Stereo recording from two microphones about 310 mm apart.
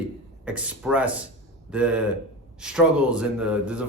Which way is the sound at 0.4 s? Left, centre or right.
Centre.